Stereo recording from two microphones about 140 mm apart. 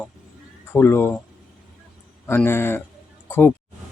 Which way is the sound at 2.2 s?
15° left (ahead or behind).